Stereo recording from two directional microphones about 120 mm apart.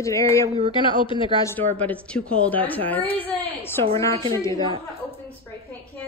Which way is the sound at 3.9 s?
25° left (ahead or behind).